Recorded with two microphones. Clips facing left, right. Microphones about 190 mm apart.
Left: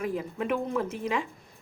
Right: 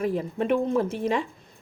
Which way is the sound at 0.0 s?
35° right (ahead or behind).